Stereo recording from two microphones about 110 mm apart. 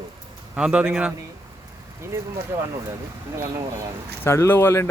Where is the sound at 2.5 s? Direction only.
25° right (ahead or behind).